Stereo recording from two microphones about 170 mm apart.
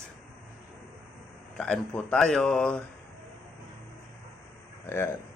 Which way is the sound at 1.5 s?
5° left (ahead or behind).